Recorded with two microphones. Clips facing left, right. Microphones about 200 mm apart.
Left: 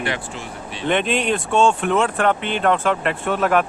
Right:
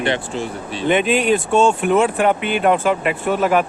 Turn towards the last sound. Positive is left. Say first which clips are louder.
# right 2 dB
turn(degrees=-5)  # may be behind; listen again after turning